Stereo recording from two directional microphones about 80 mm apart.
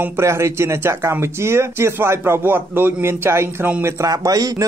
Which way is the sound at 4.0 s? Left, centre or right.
Right.